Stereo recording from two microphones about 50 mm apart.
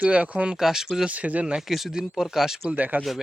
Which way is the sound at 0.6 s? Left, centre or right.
Centre.